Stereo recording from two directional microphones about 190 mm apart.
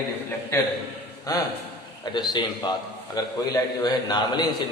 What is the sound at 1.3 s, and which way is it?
A man's voice, 20° left (ahead or behind).